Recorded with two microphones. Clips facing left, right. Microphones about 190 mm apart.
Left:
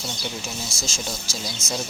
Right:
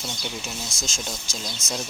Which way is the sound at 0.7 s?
15° right (ahead or behind).